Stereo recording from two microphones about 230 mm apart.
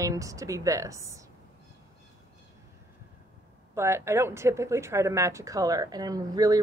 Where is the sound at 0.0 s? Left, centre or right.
Centre.